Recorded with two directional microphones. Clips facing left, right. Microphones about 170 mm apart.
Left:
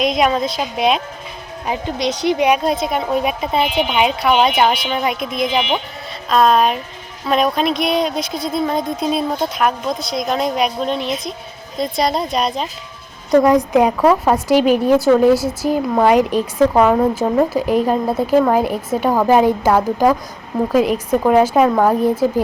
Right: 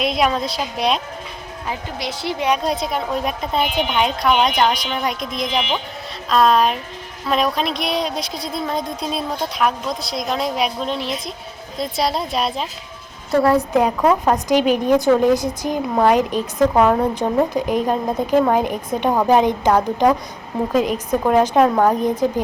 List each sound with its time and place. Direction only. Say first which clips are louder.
0.0 s a woman's voice: left 3 dB; centre (ahead or behind)
1.6 s speech: left 7 dB; 20° left (ahead or behind)
2.8 s a woman's voice: left 4 dB; centre (ahead or behind)
13.3 s a woman's voice: left 4 dB; 15° left (ahead or behind)